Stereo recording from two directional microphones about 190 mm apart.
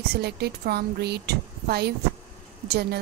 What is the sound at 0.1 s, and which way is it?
A woman's voice, 60° right (ahead or behind).